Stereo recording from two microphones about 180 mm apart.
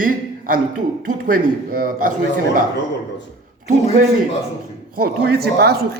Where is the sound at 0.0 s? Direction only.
50° right (ahead or behind).